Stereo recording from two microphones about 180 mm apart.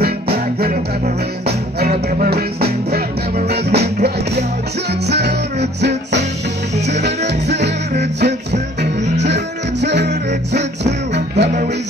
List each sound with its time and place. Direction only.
0.0 s music: 60° right (ahead or behind)